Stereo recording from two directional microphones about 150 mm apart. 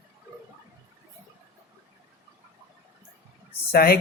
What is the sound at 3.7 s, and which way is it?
Speech, 85° left.